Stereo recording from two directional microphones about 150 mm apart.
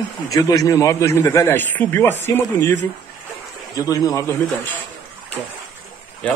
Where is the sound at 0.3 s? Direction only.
25° left (ahead or behind).